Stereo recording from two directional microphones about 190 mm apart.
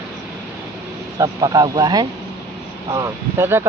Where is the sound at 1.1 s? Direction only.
20° right (ahead or behind).